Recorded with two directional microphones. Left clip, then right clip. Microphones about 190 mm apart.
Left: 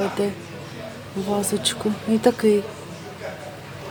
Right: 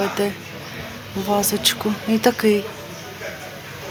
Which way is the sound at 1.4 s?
15° left (ahead or behind).